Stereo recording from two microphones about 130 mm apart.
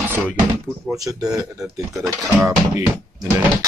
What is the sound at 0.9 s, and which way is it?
Speech, 25° right (ahead or behind).